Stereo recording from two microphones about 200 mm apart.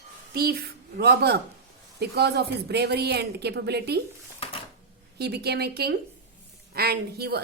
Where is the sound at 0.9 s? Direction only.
55° right (ahead or behind).